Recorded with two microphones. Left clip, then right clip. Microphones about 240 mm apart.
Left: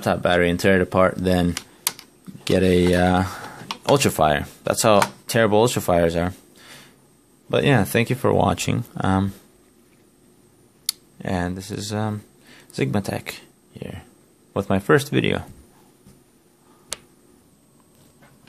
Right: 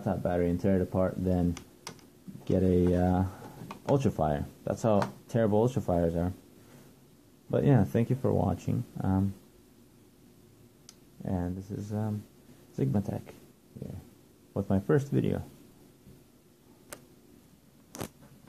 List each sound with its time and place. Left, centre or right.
0.0 s speech: left
1.5 s typing: centre; by 3.5 s left
4.0 s speech: left
7.5 s speech: left
10.9 s a sound: left
11.9 s speech: left
14.5 s speech: left